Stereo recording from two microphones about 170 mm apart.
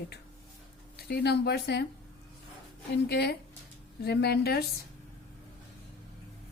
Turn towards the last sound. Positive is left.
turn(degrees=70)  # may be behind; listen again after turning